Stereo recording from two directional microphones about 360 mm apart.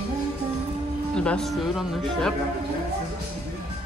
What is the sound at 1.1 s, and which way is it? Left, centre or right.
Speech, centre.